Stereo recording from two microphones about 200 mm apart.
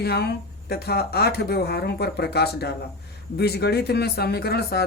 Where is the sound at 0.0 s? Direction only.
55° left (ahead or behind).